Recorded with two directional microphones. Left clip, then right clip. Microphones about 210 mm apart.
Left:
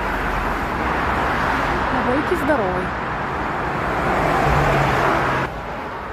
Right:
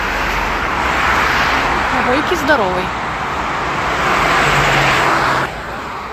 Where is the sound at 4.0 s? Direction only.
50° left (ahead or behind).